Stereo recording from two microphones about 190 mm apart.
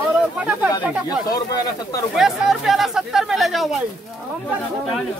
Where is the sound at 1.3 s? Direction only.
20° left (ahead or behind).